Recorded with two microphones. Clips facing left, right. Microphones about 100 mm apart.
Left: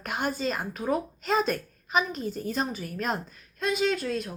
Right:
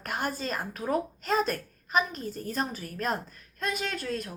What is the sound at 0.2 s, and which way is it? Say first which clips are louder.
Speech: left 4 dB; 45° right (ahead or behind).